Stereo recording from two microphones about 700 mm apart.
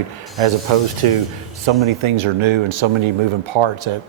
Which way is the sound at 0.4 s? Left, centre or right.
Right.